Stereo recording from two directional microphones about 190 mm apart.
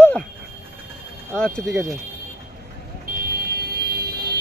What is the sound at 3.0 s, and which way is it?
Vehicle, 55° right (ahead or behind).